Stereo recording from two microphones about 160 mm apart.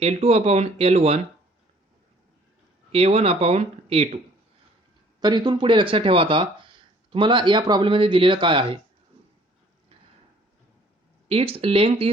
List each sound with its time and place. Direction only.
0.0 s speech: 40° right (ahead or behind)
2.9 s speech: 40° right (ahead or behind)
5.2 s speech: 25° right (ahead or behind)
11.3 s speech: 35° right (ahead or behind)